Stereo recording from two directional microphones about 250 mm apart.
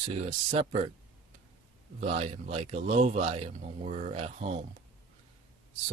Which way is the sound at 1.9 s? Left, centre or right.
Right.